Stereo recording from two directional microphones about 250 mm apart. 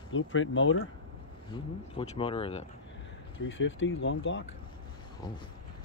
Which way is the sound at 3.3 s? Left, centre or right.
Left.